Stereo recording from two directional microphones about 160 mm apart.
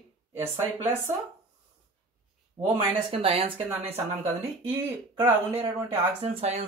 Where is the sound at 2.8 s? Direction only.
30° right (ahead or behind).